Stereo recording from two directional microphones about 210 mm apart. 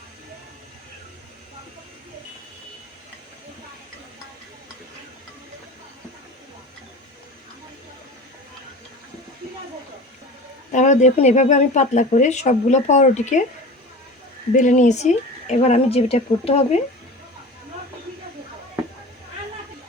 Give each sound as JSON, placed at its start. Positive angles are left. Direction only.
{"t": 10.7, "sound": "speech", "side_deg": 35}
{"t": 14.5, "sound": "speech", "side_deg": 35}